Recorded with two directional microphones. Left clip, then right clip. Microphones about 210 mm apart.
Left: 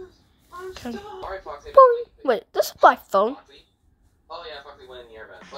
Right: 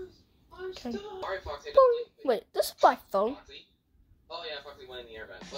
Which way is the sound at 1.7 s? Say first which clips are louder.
Left 8 dB; 15° left (ahead or behind).